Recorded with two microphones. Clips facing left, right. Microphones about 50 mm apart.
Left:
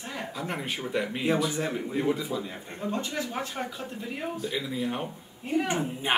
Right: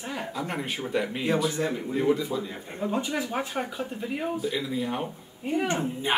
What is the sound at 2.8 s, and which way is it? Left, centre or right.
Speech, centre.